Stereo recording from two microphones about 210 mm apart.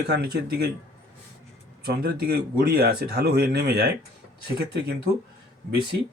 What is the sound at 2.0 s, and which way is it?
Speech, 45° right (ahead or behind).